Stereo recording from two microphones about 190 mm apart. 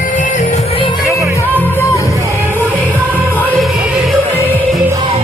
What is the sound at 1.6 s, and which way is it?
Music, 10° left (ahead or behind).